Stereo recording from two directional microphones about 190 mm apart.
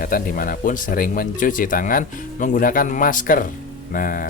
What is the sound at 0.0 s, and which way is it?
Speech, 50° left (ahead or behind).